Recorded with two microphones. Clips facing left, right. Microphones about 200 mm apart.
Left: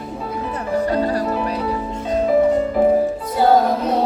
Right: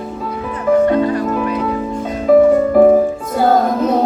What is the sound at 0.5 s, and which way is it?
Music, 35° left (ahead or behind).